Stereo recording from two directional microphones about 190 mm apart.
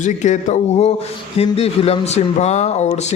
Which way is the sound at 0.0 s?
40° left (ahead or behind).